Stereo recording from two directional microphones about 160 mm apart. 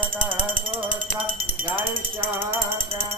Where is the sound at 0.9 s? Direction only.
10° right (ahead or behind).